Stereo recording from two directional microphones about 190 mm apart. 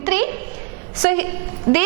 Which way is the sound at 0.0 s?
15° right (ahead or behind).